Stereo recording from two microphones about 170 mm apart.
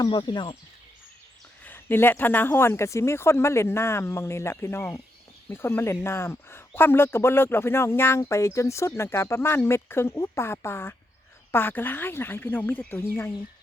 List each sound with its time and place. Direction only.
0.0 s speech: 25° left (ahead or behind)
1.6 s speech: 10° left (ahead or behind)